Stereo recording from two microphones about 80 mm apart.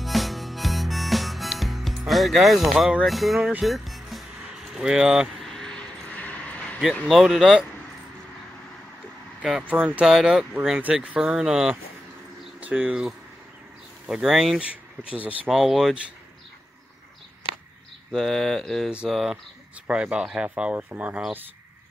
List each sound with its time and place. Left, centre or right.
0.0 s harmonica: centre
3.1 s mantra: centre
3.6 s music: centre
4.7 s speech: centre
5.4 s a sound: centre
7.1 s mantra: centre
9.4 s speech: centre
10.0 s mantra: centre
10.8 s speech: centre
12.5 s speech: centre
14.6 s speech: centre
15.4 s mantra: centre
18.1 s mantra: centre
19.9 s speech: centre